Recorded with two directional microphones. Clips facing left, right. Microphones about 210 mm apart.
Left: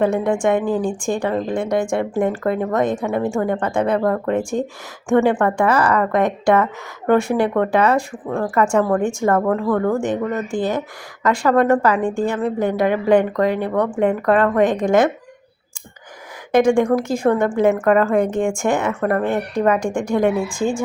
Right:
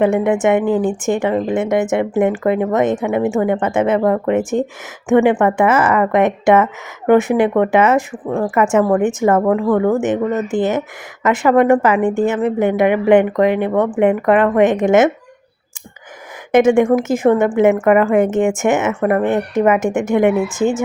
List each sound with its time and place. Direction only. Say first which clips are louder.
0.0 s speech: right 3 dB; 20° right (ahead or behind)
16.5 s speech: right 3 dB; 20° right (ahead or behind)